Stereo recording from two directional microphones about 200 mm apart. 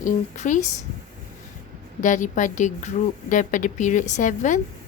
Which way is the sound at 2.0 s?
40° left (ahead or behind).